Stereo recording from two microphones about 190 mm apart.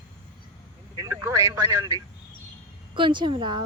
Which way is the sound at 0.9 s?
15° right (ahead or behind).